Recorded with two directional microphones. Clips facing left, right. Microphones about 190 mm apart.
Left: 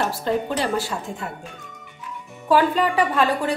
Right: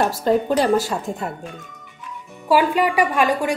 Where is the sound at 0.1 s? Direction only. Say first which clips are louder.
Right 5 dB; 40° right (ahead or behind).